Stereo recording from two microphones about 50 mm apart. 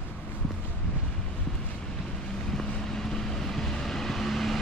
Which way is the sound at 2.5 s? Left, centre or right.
Centre.